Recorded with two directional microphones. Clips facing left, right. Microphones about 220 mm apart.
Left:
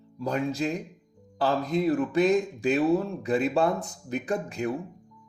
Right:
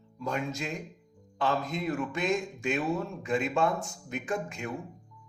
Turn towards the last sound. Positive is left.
turn(degrees=35)  # may be behind; listen again after turning